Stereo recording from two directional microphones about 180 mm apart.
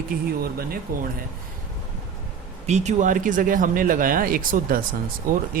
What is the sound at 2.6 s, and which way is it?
Speech, 40° right (ahead or behind).